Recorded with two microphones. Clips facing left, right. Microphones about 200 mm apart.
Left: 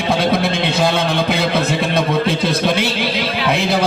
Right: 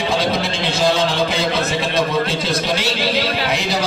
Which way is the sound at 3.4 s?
55° left (ahead or behind).